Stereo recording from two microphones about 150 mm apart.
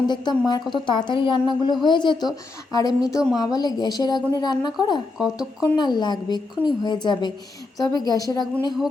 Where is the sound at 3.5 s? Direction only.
25° left (ahead or behind).